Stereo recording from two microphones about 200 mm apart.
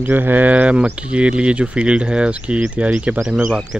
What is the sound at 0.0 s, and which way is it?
Speech, 10° right (ahead or behind).